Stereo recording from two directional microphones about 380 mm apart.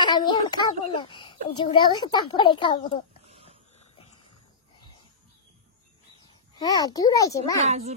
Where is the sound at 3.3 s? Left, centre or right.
Centre.